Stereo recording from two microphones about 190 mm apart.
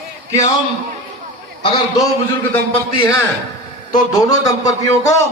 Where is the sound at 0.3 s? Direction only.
15° left (ahead or behind).